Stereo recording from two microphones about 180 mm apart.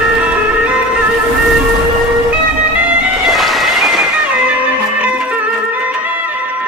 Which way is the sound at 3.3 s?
Centre (ahead or behind).